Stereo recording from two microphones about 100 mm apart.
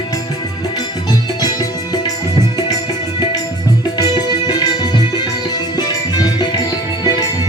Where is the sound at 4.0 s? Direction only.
40° left (ahead or behind).